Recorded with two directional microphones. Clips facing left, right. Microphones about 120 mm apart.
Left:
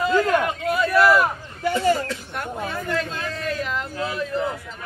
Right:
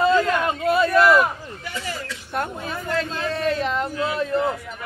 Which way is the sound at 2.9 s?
30° right (ahead or behind).